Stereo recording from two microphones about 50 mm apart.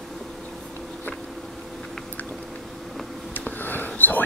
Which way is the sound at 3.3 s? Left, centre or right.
Left.